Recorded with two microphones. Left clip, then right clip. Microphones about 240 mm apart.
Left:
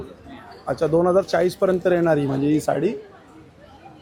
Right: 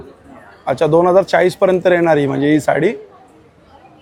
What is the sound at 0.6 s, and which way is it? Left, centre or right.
Speech, centre.